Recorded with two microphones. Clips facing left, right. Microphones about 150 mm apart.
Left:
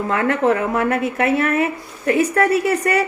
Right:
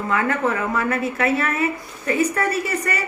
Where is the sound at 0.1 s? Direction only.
65° left (ahead or behind).